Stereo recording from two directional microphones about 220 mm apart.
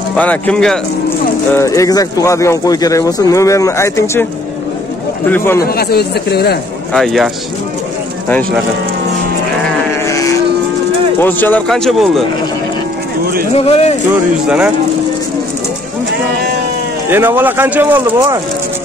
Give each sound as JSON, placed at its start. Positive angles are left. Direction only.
{"t": 0.1, "sound": "speech", "side_deg": 5}
{"t": 5.3, "sound": "speech", "side_deg": 10}
{"t": 5.7, "sound": "speech", "side_deg": 45}
{"t": 6.9, "sound": "speech", "side_deg": 0}
{"t": 8.3, "sound": "speech", "side_deg": 5}
{"t": 10.0, "sound": "vehicle", "side_deg": 15}
{"t": 11.1, "sound": "speech", "side_deg": 10}
{"t": 13.2, "sound": "speech", "side_deg": -45}
{"t": 13.6, "sound": "speech", "side_deg": 25}
{"t": 17.1, "sound": "speech", "side_deg": -10}